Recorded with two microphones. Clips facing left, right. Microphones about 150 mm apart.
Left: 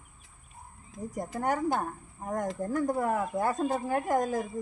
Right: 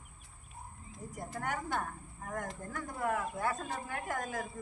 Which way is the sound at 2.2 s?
40° left (ahead or behind).